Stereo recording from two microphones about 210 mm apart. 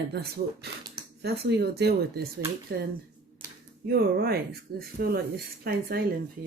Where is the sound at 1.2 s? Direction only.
50° right (ahead or behind).